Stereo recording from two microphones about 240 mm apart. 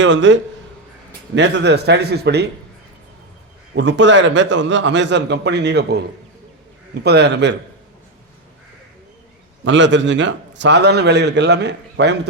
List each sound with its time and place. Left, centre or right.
0.0 s a man's voice: right
1.4 s a man's voice: right
3.8 s a man's voice: right
7.0 s a man's voice: right
9.6 s a man's voice: right